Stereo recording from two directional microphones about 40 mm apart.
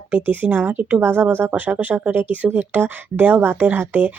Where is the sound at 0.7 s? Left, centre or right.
Right.